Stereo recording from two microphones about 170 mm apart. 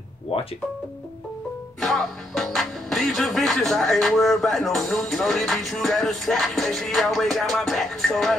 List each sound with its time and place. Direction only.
0.3 s music: 35° left (ahead or behind)
1.8 s speech: centre (ahead or behind)